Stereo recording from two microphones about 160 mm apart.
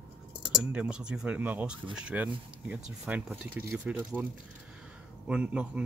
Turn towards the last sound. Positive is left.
turn(degrees=-10)  # may be behind; listen again after turning